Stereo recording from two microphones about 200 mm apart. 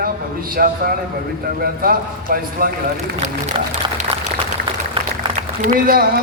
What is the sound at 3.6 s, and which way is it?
Speech, 25° right (ahead or behind).